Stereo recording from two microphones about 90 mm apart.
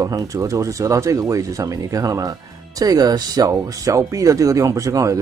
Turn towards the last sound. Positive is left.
turn(degrees=-35)  # may be behind; listen again after turning